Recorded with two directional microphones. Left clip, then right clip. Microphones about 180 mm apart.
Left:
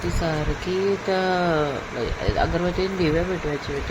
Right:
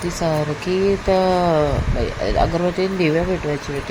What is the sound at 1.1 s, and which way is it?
Speech, 25° right (ahead or behind).